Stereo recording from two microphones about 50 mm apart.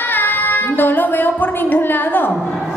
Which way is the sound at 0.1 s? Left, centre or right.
Left.